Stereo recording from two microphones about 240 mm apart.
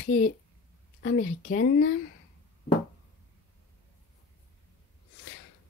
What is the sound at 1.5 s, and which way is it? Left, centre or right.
Speech, left.